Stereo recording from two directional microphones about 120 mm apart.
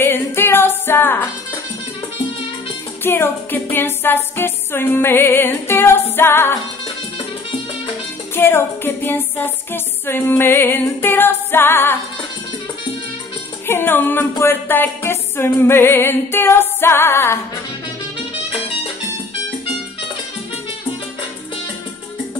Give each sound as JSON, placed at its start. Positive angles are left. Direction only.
{"t": 0.0, "sound": "music", "side_deg": 20}
{"t": 3.0, "sound": "music", "side_deg": 20}
{"t": 8.4, "sound": "music", "side_deg": 20}
{"t": 13.7, "sound": "music", "side_deg": 20}